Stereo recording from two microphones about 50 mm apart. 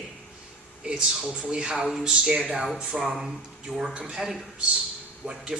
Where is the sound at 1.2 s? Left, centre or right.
Right.